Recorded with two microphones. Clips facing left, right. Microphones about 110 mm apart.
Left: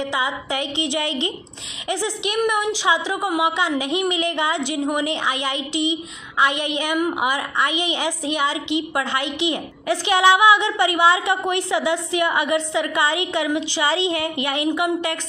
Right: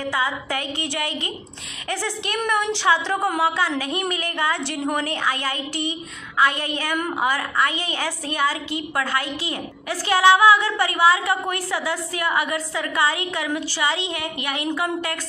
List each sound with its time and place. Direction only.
0.1 s a woman's voice: 20° left (ahead or behind)